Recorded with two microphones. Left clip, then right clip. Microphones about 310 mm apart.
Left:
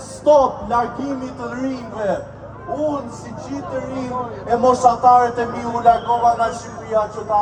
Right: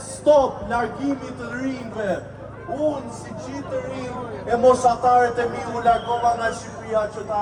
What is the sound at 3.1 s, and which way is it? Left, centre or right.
A man's voice, left.